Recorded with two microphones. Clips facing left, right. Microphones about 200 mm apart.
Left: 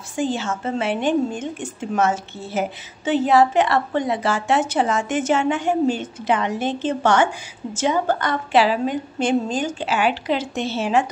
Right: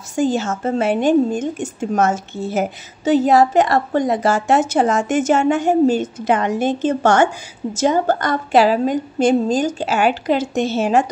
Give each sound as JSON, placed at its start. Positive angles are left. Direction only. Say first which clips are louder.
{"t": 0.1, "sound": "a woman's voice", "louder": "right 5 dB", "side_deg": -45}